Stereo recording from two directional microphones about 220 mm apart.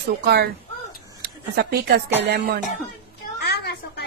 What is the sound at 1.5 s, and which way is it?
Speech, 45° right (ahead or behind).